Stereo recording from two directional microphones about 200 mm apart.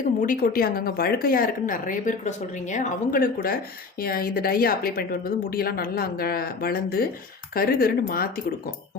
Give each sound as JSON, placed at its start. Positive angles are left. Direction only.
{"t": 0.0, "sound": "speech", "side_deg": 45}